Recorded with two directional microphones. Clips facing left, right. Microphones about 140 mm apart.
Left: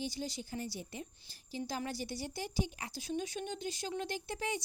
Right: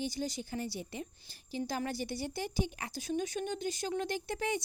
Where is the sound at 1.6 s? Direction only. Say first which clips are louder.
Right 3 dB; 55° right (ahead or behind).